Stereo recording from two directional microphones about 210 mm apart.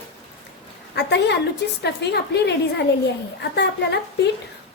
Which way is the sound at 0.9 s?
55° left (ahead or behind).